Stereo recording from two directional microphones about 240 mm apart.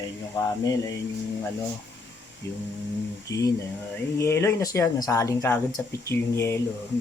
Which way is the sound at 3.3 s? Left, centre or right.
Centre.